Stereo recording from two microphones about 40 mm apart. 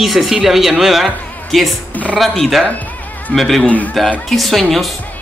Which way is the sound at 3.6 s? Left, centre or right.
Left.